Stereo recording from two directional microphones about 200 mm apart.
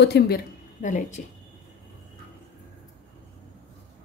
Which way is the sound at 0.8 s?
40° left (ahead or behind).